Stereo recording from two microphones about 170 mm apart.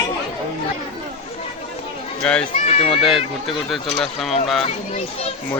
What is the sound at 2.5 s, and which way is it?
Speech, 40° left (ahead or behind).